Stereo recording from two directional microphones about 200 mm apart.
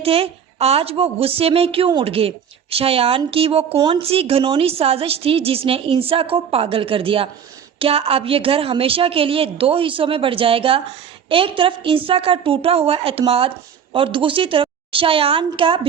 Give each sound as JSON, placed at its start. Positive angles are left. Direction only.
{"t": 0.0, "sound": "a woman's voice", "side_deg": -30}